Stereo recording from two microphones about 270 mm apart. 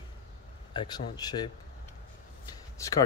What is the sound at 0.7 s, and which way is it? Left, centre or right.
Speech, centre.